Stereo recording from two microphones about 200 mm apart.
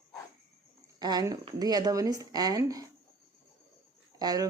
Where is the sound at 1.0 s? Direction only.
20° right (ahead or behind).